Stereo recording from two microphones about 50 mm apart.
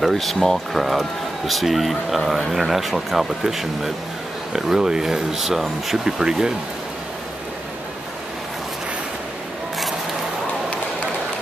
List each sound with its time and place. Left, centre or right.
0.0 s speech: centre